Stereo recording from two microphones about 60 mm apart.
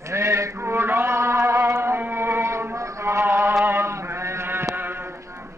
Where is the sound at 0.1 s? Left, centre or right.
Right.